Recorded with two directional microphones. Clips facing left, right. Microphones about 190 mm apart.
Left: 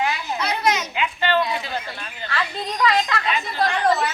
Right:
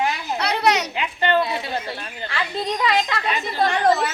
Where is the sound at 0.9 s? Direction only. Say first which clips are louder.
Right 1 dB; 45° right (ahead or behind).